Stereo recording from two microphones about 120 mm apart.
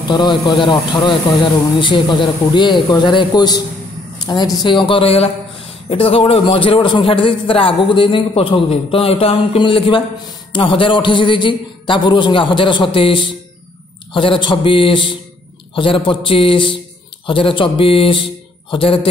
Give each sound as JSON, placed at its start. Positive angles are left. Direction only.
{"t": 0.1, "sound": "a man's voice", "side_deg": 40}